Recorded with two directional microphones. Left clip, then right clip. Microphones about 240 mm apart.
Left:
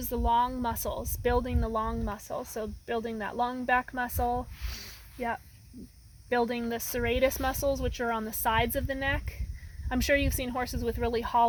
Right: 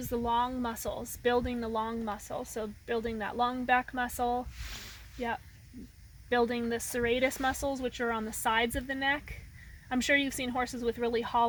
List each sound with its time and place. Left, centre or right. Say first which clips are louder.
0.0 s speech: left 3 dB; left
6.2 s speech: even; left